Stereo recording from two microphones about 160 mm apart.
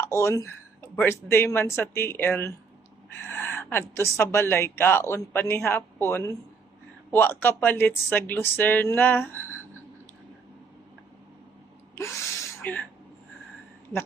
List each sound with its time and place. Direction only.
0.0 s speech: 15° left (ahead or behind)
11.9 s gasp: 15° left (ahead or behind)